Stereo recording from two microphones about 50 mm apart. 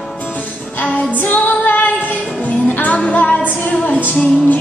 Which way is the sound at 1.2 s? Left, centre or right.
Left.